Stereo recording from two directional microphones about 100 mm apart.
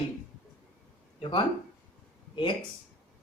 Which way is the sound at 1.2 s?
55° left (ahead or behind).